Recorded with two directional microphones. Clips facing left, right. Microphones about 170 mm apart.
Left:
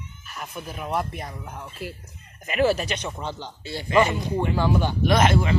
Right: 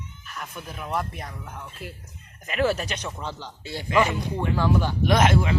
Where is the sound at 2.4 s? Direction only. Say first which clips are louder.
Left 3 dB; 5° left (ahead or behind).